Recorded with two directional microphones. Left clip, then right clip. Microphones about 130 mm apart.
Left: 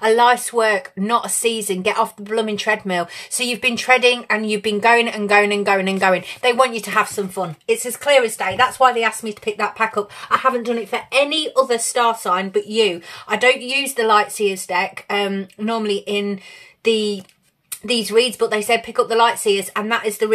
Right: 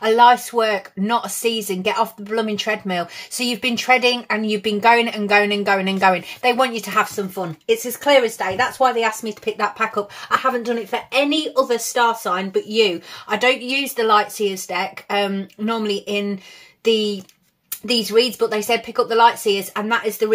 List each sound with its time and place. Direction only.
0.0 s speech: 30° left (ahead or behind)
10.3 s speech: 15° left (ahead or behind); by 20.3 s 30° left (ahead or behind)